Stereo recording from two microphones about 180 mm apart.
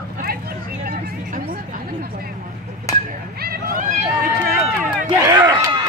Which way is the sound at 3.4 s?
55° right (ahead or behind).